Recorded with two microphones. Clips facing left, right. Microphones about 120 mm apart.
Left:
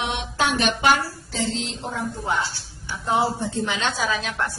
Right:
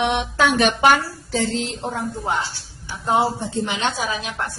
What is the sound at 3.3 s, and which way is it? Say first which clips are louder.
A woman's voice: right 1 dB; 20° right (ahead or behind).